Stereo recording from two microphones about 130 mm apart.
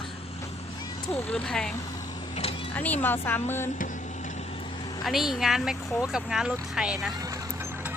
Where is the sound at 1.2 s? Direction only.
5° left (ahead or behind).